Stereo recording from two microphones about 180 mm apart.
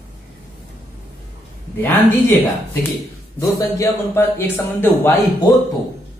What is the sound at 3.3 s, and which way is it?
Speech, 15° left (ahead or behind).